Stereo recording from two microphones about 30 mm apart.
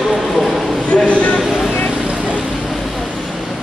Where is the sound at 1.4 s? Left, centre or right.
Centre.